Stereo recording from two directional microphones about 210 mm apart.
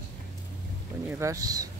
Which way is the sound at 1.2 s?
15° right (ahead or behind).